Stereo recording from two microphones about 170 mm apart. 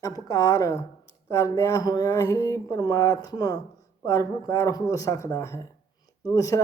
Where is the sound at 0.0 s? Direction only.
20° left (ahead or behind).